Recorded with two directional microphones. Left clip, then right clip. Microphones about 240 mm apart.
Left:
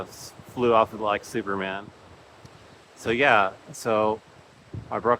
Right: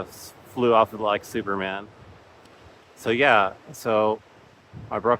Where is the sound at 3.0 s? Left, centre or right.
Centre.